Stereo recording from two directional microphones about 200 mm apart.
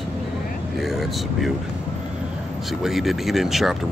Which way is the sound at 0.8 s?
Centre (ahead or behind).